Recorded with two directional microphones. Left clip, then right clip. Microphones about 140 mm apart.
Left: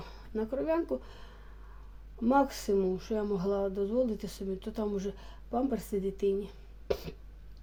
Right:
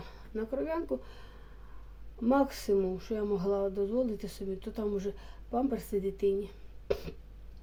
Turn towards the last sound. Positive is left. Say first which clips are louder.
# even
turn(degrees=25)  # may be behind; listen again after turning